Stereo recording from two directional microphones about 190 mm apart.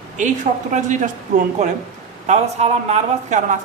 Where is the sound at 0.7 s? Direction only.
40° right (ahead or behind).